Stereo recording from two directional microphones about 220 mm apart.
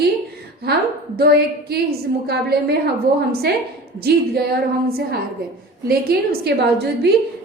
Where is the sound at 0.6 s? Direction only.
45° right (ahead or behind).